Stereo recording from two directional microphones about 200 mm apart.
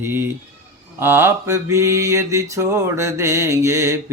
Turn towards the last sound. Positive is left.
turn(degrees=-15)  # may be behind; listen again after turning